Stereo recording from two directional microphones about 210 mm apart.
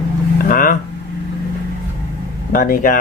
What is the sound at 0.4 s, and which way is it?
Speech, 40° left (ahead or behind).